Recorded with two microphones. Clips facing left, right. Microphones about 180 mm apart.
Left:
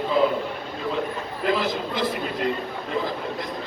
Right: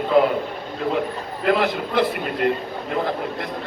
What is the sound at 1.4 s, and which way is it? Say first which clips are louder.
Speech: right 4 dB; 60° right (ahead or behind).